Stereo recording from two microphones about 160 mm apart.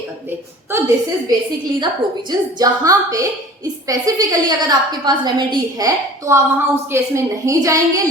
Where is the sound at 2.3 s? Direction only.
25° right (ahead or behind).